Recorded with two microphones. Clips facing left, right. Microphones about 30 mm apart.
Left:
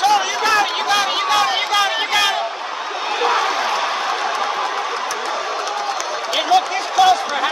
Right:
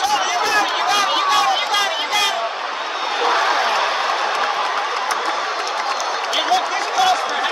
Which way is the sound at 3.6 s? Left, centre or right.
Centre.